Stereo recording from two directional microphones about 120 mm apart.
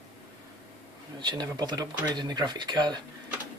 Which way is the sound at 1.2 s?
35° right (ahead or behind).